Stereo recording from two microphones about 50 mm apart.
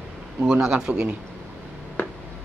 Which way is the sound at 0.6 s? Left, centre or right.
Centre.